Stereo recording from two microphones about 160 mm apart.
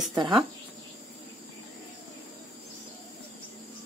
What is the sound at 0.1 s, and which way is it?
Speech, 30° right (ahead or behind).